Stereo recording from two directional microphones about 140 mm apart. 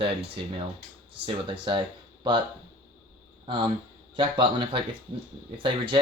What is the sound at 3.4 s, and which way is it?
Speech, 35° right (ahead or behind).